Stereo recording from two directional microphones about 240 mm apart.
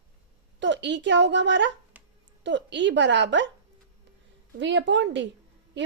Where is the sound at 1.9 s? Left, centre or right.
Centre.